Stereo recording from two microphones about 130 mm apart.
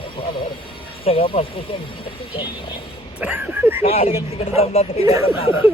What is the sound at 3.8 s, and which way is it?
Speech, 50° left (ahead or behind).